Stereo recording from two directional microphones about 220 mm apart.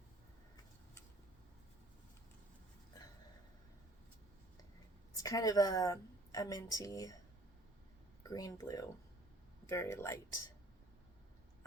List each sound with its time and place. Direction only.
5.1 s a woman's voice: 15° left (ahead or behind)
8.2 s speech: 15° left (ahead or behind)